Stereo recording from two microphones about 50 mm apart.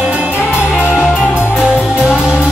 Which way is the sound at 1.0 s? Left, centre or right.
Left.